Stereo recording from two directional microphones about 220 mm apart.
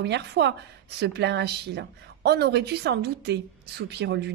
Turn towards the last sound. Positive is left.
turn(degrees=-50)  # may be behind; listen again after turning